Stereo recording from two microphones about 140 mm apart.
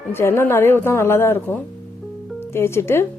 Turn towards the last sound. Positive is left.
turn(degrees=15)  # may be behind; listen again after turning